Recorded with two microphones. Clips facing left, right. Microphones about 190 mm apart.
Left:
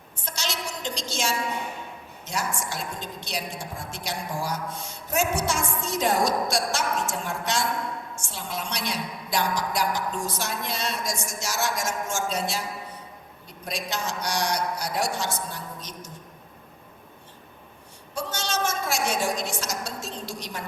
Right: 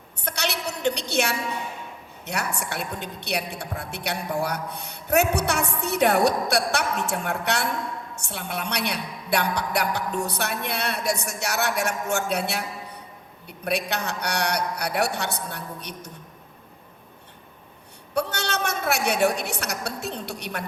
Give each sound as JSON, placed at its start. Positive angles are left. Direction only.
{"t": 0.2, "sound": "a sound", "side_deg": -65}
{"t": 2.2, "sound": "a woman's voice", "side_deg": -65}
{"t": 18.1, "sound": "a woman's voice", "side_deg": -65}